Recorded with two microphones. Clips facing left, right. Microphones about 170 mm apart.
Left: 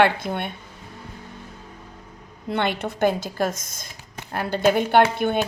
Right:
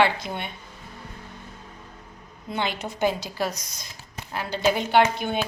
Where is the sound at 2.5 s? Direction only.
60° left (ahead or behind).